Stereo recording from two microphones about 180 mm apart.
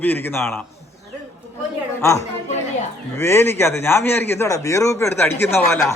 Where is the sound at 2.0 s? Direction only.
15° left (ahead or behind).